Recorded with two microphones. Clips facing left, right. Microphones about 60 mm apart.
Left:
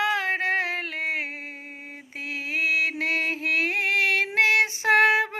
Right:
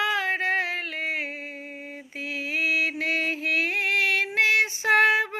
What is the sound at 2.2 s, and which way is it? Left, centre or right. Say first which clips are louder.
Music: even; left.